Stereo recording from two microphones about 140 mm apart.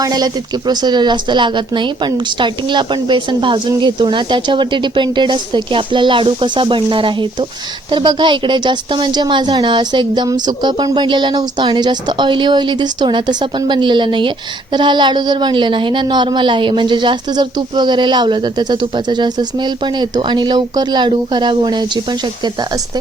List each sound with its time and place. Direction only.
0.0 s a woman's voice: 30° right (ahead or behind)